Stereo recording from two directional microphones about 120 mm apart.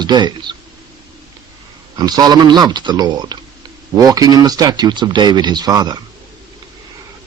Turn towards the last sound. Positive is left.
turn(degrees=-30)  # may be behind; listen again after turning